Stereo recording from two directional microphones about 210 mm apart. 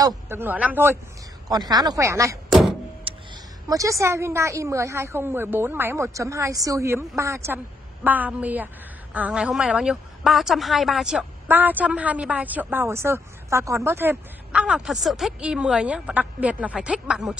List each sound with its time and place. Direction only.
0.0 s a woman's voice: 10° right (ahead or behind)
3.6 s a woman's voice: 15° right (ahead or behind)